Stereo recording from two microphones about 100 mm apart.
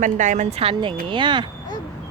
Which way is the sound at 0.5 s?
70° right (ahead or behind).